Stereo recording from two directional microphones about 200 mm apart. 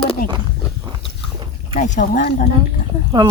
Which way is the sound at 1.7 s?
40° left (ahead or behind).